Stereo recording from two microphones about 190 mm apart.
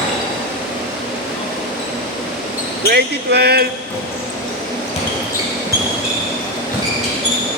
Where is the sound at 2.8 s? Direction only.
60° right (ahead or behind).